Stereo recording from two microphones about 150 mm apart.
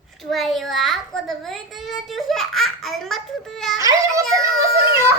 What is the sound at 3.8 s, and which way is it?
Speech, 20° right (ahead or behind).